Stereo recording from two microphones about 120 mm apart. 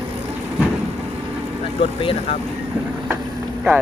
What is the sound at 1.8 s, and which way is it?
Speech, 50° left (ahead or behind).